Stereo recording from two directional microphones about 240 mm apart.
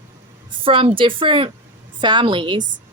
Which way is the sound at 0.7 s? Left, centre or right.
Right.